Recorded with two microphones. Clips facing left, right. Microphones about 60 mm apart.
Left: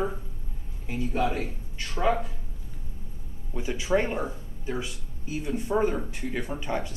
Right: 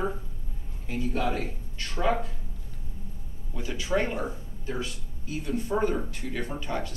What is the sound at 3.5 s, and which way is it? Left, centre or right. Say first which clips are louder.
Speech: left 3 dB; centre.